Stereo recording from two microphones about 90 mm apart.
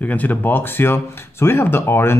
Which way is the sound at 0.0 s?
15° left (ahead or behind).